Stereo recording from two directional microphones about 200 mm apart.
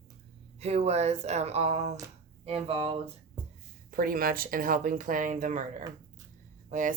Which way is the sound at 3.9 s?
45° right (ahead or behind).